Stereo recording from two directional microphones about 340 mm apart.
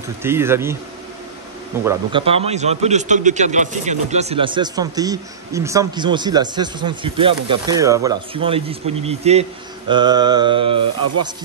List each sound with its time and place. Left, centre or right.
0.2 s speech: centre
1.9 s speech: centre